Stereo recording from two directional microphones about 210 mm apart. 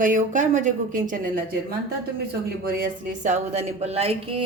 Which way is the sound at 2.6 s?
40° right (ahead or behind).